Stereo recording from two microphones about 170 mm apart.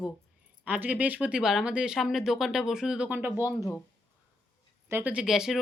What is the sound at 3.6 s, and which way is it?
Speech, 15° left (ahead or behind).